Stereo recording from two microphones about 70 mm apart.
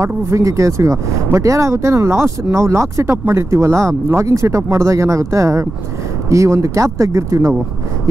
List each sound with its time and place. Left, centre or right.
0.0 s speech: right